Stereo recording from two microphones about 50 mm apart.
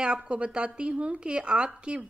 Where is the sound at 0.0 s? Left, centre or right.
Centre.